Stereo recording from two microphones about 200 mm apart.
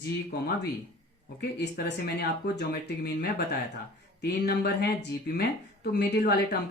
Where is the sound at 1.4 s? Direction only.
55° left (ahead or behind).